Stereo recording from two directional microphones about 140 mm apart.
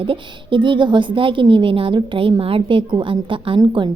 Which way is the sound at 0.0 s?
35° right (ahead or behind).